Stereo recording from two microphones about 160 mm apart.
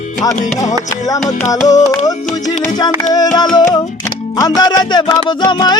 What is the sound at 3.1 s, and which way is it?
Music, 25° left (ahead or behind).